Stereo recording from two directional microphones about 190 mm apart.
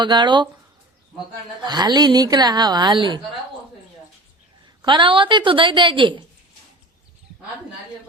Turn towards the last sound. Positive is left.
turn(degrees=-25)  # may be behind; listen again after turning